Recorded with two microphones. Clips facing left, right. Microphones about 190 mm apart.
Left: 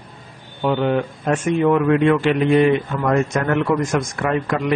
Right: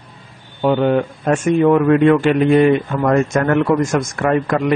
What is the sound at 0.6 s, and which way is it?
A man's voice, 45° right (ahead or behind).